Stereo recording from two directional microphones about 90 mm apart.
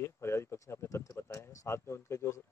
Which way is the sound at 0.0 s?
30° left (ahead or behind).